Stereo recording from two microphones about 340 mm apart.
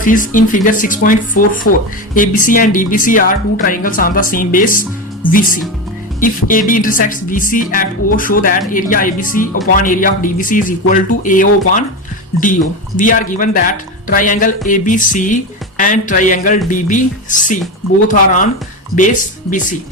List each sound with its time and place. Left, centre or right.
0.0 s speech: left
1.7 s speech: left
2.1 s speech: left